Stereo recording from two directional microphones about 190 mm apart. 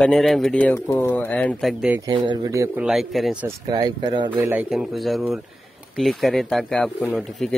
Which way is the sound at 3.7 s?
20° right (ahead or behind).